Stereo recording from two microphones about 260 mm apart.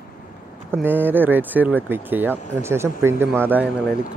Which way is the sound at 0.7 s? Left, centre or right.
Centre.